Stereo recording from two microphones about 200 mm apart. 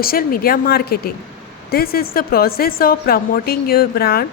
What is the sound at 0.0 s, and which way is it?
A woman's voice, 45° left (ahead or behind).